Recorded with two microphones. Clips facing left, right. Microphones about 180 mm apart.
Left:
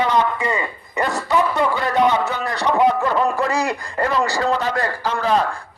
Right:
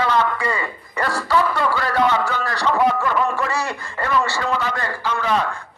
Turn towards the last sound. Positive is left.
turn(degrees=35)  # may be behind; listen again after turning